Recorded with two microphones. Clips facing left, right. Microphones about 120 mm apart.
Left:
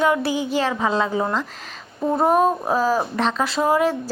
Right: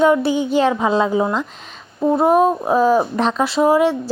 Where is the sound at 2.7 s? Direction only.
15° right (ahead or behind).